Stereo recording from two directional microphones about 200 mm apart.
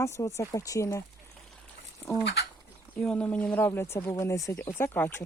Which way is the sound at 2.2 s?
55° left (ahead or behind).